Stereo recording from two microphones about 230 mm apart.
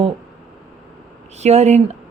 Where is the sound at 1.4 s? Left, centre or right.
Right.